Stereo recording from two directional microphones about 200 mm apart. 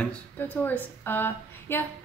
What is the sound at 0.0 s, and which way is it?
A woman's voice, 10° left (ahead or behind).